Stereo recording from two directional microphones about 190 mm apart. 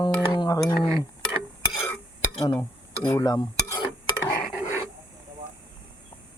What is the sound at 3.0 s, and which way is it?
Stir, 15° left (ahead or behind).